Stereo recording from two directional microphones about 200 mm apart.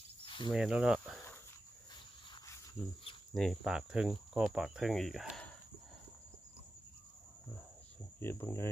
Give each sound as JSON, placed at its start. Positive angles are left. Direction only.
{"t": 0.3, "sound": "cricket", "side_deg": 25}
{"t": 0.5, "sound": "speech", "side_deg": -5}
{"t": 1.9, "sound": "a sound", "side_deg": 20}
{"t": 3.3, "sound": "speech", "side_deg": 0}
{"t": 8.2, "sound": "speech", "side_deg": 10}